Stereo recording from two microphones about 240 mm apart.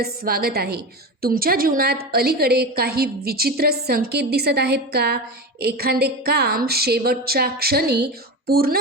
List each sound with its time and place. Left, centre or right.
0.0 s a woman's voice: right